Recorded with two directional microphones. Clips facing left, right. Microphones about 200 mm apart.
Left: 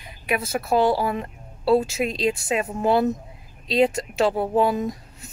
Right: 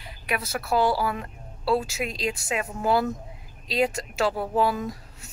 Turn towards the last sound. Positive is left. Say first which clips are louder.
# left 4 dB
turn(degrees=20)  # may be behind; listen again after turning